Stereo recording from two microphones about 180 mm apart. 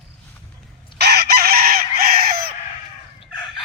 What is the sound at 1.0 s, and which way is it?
Chicken, 65° right (ahead or behind).